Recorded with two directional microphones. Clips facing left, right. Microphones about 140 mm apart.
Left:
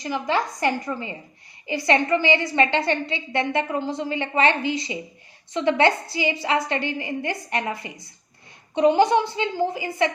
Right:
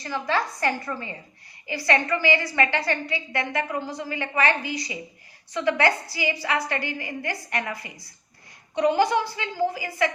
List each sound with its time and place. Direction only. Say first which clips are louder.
0.0 s a woman's voice: left 2 dB; 20° left (ahead or behind)